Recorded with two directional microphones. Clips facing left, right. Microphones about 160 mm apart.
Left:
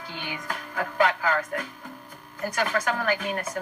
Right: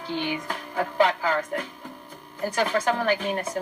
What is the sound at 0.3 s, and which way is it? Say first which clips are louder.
Music: right 3 dB; 25° right (ahead or behind).